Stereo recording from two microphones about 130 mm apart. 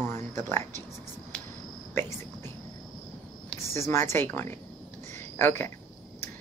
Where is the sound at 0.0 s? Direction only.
20° left (ahead or behind).